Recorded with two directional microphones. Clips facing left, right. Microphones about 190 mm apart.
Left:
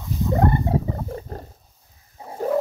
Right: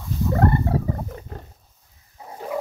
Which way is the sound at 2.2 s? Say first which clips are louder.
Left 2 dB; 25° left (ahead or behind).